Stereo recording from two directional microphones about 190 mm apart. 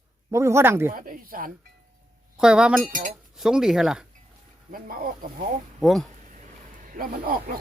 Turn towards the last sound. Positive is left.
turn(degrees=-50)  # may be behind; listen again after turning